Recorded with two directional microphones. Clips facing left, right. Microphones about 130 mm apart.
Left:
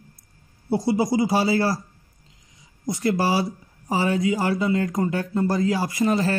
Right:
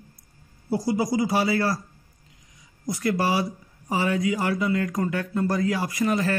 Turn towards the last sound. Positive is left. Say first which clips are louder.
# left 2 dB
turn(degrees=30)  # may be behind; listen again after turning